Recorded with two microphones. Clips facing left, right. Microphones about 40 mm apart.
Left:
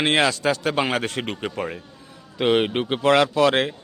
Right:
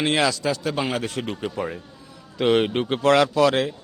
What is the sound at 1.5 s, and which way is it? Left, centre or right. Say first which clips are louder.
Speech: even; left.